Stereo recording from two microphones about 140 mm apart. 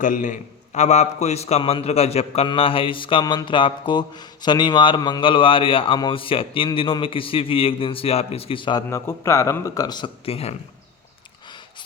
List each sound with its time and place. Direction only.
0.0 s a man's voice: 65° left (ahead or behind); by 2.5 s 45° left (ahead or behind)
2.5 s mantra: 40° left (ahead or behind)
8.9 s speech: 20° left (ahead or behind)
10.2 s a man's voice: 45° left (ahead or behind)